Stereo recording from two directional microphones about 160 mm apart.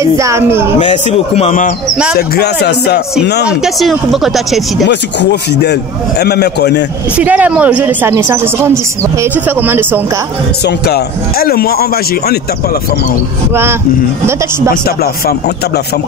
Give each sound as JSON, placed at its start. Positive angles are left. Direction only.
{"t": 0.2, "sound": "a woman's voice", "side_deg": -15}
{"t": 0.8, "sound": "a man's voice", "side_deg": 45}
{"t": 2.1, "sound": "a man's voice", "side_deg": 85}
{"t": 3.4, "sound": "speech", "side_deg": 0}
{"t": 4.8, "sound": "a man's voice", "side_deg": 90}
{"t": 7.2, "sound": "a woman's voice", "side_deg": -10}
{"t": 10.6, "sound": "speech", "side_deg": 80}